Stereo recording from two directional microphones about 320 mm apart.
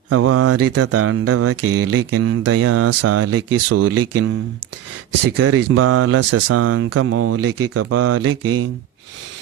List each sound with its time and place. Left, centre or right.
0.1 s speech: right
5.4 s speech: right